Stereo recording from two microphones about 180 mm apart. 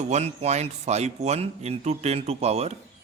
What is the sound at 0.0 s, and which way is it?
A man's voice, 40° right (ahead or behind).